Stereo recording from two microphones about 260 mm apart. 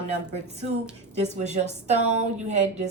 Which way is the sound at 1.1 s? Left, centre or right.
Right.